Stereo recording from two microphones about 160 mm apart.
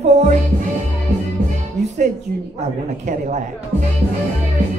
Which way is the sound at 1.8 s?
90° right.